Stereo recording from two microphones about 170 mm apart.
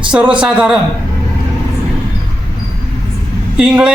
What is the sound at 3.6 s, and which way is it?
Speech, 5° right (ahead or behind).